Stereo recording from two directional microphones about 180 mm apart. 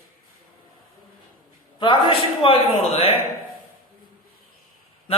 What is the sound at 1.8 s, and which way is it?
A man's voice, 25° left (ahead or behind).